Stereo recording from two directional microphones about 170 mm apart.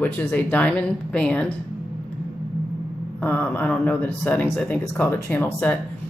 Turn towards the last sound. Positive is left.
turn(degrees=10)  # may be behind; listen again after turning